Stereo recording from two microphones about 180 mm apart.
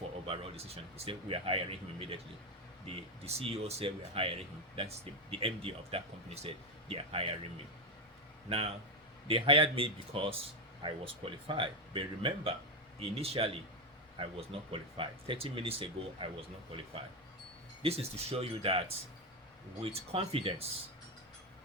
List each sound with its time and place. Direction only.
0.3 s speech: 35° right (ahead or behind)
8.4 s speech: 35° right (ahead or behind)
17.8 s speech: 35° right (ahead or behind)